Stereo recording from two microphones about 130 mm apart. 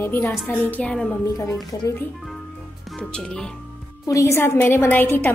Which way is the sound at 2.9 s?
5° left (ahead or behind).